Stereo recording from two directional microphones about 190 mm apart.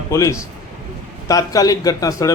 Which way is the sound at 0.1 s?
15° left (ahead or behind).